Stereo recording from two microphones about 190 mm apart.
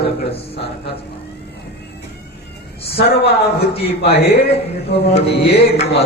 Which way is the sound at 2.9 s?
55° left (ahead or behind).